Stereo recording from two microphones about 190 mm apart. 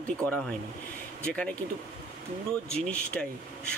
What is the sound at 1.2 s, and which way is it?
Speech, 5° left (ahead or behind).